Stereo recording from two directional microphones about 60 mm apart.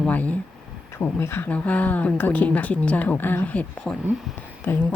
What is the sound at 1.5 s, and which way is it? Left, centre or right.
Speech, left.